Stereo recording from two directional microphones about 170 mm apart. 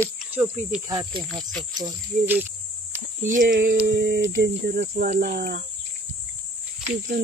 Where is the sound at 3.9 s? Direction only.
70° right (ahead or behind).